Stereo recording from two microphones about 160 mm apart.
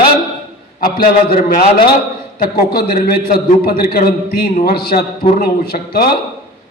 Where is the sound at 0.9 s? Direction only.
65° left (ahead or behind).